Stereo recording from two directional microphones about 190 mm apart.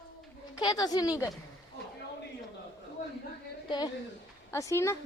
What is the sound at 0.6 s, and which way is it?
Speech, 20° left (ahead or behind).